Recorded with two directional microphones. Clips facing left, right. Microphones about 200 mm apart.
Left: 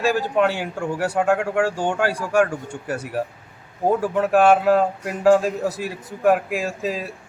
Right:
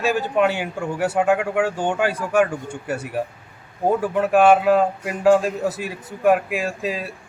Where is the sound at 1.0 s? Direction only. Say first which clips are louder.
Right 1 dB; centre (ahead or behind).